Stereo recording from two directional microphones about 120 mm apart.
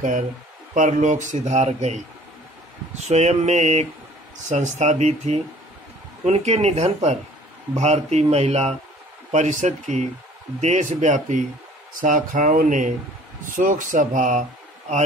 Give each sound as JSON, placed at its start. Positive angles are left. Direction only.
{"t": 0.7, "sound": "speech", "side_deg": -90}
{"t": 3.1, "sound": "speech", "side_deg": -70}
{"t": 9.3, "sound": "speech", "side_deg": -80}